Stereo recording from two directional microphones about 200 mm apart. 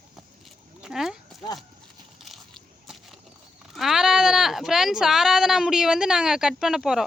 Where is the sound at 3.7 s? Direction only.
Centre (ahead or behind).